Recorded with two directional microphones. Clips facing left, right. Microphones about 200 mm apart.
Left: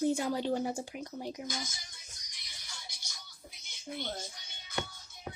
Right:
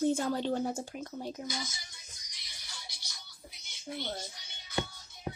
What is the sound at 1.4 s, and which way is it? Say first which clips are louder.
Speech: right 1 dB; 50° left (ahead or behind).